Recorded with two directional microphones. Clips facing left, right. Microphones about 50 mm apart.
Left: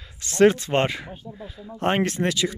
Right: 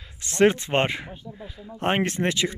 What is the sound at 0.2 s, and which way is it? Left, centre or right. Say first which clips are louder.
Speech: left 2 dB; right.